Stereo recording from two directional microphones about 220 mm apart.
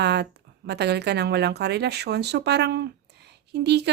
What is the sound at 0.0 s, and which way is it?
A woman's voice, 50° right (ahead or behind).